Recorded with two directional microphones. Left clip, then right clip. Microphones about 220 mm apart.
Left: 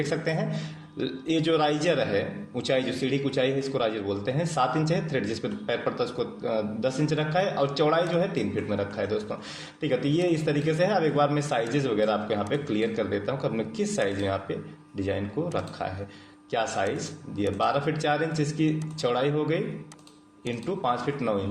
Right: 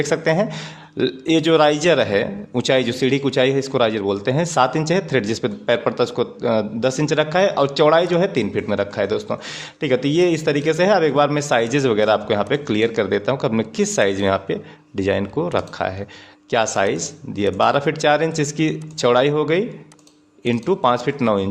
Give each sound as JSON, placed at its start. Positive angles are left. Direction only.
{"t": 0.0, "sound": "speech", "side_deg": -50}